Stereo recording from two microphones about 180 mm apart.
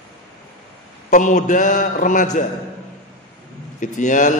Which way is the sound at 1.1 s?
45° left (ahead or behind).